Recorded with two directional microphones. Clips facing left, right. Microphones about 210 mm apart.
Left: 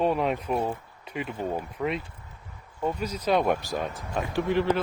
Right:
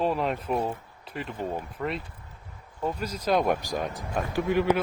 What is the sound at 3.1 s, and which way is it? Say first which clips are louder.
Speech: even; 10° left (ahead or behind).